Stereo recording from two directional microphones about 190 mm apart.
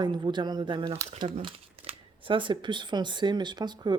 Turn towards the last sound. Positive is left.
turn(degrees=-20)  # may be behind; listen again after turning